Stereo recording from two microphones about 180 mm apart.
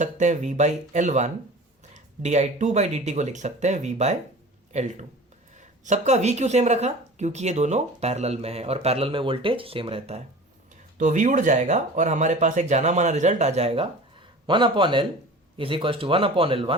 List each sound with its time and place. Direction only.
0.0 s speech: 40° right (ahead or behind)
10.9 s speech: 45° right (ahead or behind)